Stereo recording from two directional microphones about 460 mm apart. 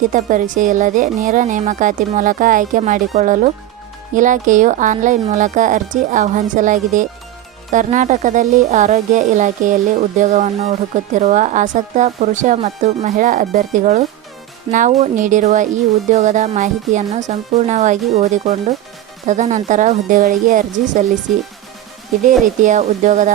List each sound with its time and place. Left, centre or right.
0.0 s speech: centre
22.2 s speech: centre